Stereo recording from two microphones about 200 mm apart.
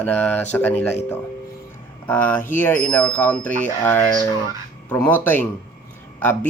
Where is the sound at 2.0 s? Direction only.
10° left (ahead or behind).